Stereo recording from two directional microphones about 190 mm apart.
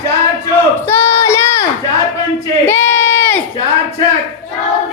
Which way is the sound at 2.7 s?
10° left (ahead or behind).